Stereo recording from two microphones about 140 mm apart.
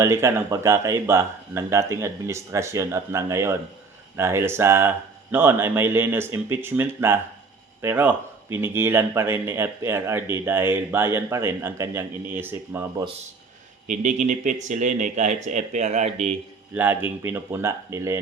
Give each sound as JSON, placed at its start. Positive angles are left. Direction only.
{"t": 0.0, "sound": "speech", "side_deg": -20}
{"t": 13.8, "sound": "speech", "side_deg": -60}
{"t": 16.7, "sound": "speech", "side_deg": -15}